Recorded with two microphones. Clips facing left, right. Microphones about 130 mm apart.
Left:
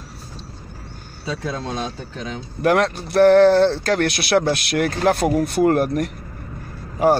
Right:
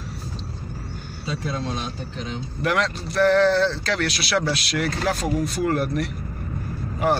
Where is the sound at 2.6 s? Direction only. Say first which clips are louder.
Left 6 dB; 50° left (ahead or behind).